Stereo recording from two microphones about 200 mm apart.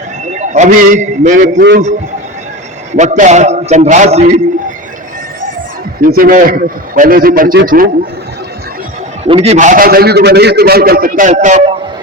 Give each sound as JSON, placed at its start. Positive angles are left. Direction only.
{"t": 0.3, "sound": "a man's voice", "side_deg": -35}
{"t": 1.5, "sound": "a man's voice", "side_deg": -60}
{"t": 2.9, "sound": "a man's voice", "side_deg": -35}
{"t": 6.0, "sound": "a man's voice", "side_deg": -45}
{"t": 9.2, "sound": "a man's voice", "side_deg": -30}